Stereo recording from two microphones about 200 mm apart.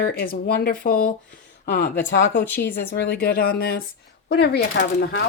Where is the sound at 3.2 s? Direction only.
50° left (ahead or behind).